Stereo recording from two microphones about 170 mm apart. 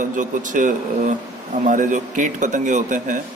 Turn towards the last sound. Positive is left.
turn(degrees=-45)  # may be behind; listen again after turning